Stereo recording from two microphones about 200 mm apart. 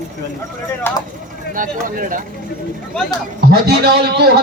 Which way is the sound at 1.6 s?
40° right (ahead or behind).